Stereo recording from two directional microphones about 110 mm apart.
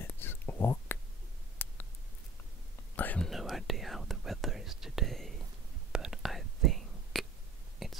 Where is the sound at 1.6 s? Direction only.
20° left (ahead or behind).